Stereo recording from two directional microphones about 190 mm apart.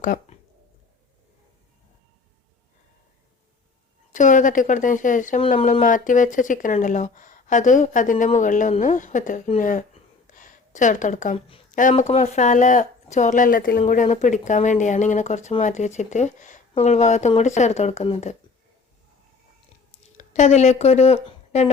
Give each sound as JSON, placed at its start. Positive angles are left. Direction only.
{"t": 0.0, "sound": "a sound", "side_deg": 45}
{"t": 4.1, "sound": "a woman's voice", "side_deg": 40}
{"t": 5.5, "sound": "speech", "side_deg": 30}
{"t": 5.8, "sound": "a woman's voice", "side_deg": 40}
{"t": 20.1, "sound": "speech", "side_deg": 35}